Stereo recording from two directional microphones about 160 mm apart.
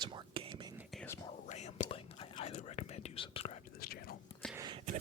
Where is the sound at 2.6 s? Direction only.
45° left (ahead or behind).